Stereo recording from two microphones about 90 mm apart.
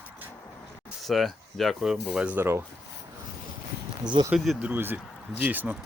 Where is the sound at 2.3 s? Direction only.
25° right (ahead or behind).